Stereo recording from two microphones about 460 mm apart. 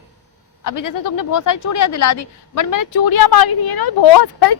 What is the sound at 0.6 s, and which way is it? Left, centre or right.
Speech, left.